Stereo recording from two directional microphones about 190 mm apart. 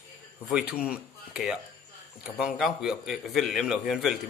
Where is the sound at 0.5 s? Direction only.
5° right (ahead or behind).